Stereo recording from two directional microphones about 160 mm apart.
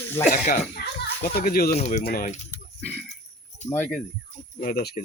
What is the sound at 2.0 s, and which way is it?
Speech, 70° left (ahead or behind).